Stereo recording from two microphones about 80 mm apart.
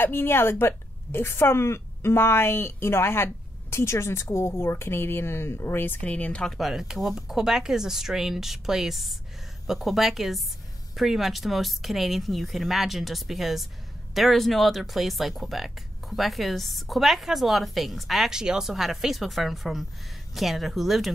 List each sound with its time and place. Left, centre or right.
0.0 s a woman's voice: left
6.4 s speech: centre